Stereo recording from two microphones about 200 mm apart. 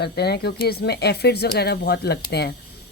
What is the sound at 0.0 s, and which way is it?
Speech, 55° left (ahead or behind).